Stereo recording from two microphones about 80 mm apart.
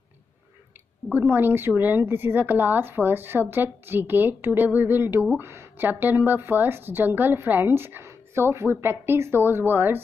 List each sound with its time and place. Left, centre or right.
1.1 s a woman's voice: right